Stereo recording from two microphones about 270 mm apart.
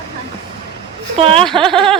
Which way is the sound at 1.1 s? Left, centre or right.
Right.